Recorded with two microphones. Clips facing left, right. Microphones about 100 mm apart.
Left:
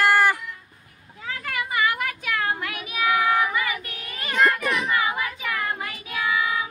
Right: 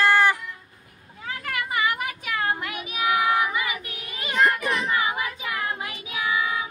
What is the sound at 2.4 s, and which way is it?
Child singing, 20° right (ahead or behind).